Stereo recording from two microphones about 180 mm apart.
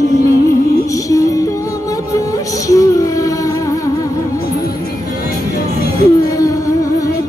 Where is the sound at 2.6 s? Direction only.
20° left (ahead or behind).